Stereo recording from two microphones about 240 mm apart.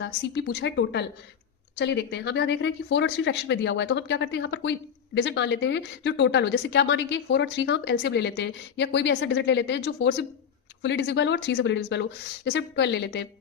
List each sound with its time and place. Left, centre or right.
0.0 s speech: left